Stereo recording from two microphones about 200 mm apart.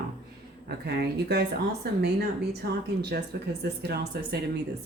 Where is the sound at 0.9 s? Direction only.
55° right (ahead or behind).